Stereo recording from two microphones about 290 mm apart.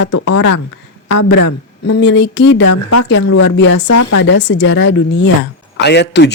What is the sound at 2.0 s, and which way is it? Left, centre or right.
Speech, left.